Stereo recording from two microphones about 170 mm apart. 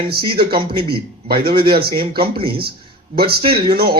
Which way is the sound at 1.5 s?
30° right (ahead or behind).